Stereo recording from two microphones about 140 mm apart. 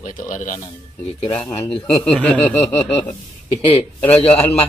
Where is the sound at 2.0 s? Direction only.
10° left (ahead or behind).